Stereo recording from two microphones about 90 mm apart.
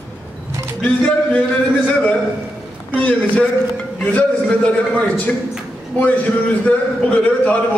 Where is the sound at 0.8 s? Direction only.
15° left (ahead or behind).